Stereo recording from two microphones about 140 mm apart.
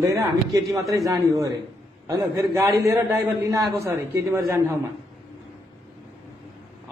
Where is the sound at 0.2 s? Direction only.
25° right (ahead or behind).